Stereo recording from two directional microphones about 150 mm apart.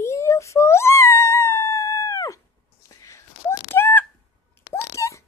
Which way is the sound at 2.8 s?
20° left (ahead or behind).